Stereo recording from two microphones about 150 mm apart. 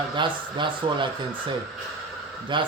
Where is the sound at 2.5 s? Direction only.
35° right (ahead or behind).